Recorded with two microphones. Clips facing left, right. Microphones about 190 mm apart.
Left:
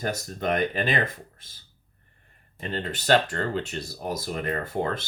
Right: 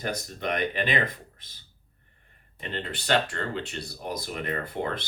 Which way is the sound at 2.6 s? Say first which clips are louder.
Left 3 dB; 40° left (ahead or behind).